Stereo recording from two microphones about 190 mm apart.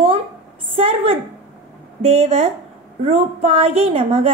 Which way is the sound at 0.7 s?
30° right (ahead or behind).